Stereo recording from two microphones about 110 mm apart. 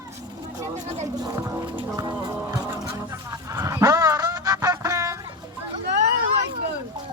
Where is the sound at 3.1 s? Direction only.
30° right (ahead or behind).